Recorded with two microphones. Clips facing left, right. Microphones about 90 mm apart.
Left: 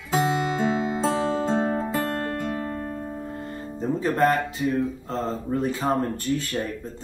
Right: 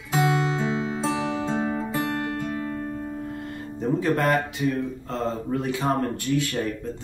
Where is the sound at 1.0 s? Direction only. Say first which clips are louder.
Left 2 dB; 40° left (ahead or behind).